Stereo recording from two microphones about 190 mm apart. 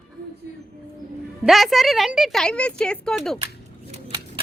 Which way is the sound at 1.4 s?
Centre (ahead or behind).